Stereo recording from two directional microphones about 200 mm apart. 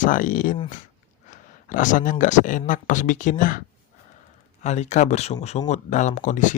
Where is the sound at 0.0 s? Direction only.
40° left (ahead or behind).